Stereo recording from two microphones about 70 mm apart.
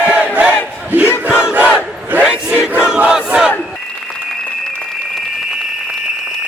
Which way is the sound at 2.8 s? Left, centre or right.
Centre.